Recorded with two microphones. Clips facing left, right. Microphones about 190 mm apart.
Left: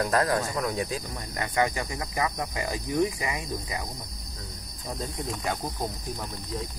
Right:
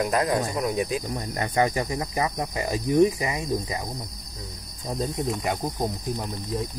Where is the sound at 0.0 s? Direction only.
15° right (ahead or behind).